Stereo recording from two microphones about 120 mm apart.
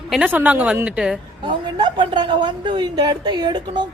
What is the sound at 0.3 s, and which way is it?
Speech, 15° right (ahead or behind).